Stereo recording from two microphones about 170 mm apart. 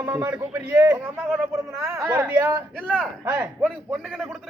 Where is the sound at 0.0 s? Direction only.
15° right (ahead or behind).